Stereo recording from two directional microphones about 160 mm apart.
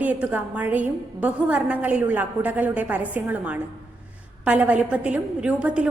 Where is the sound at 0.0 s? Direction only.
10° right (ahead or behind).